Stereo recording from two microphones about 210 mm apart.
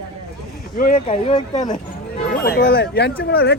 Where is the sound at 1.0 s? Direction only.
30° left (ahead or behind).